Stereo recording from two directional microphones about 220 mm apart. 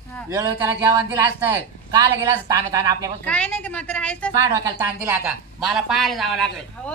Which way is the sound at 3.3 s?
5° left (ahead or behind).